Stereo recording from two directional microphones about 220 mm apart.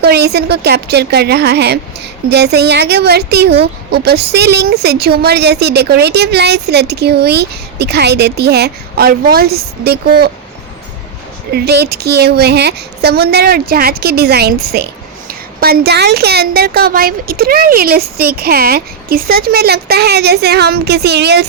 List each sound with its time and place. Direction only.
0.0 s a woman's voice: 45° right (ahead or behind)
11.5 s a woman's voice: 50° right (ahead or behind)